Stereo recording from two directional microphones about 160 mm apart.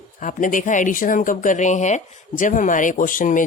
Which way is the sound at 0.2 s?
55° left (ahead or behind).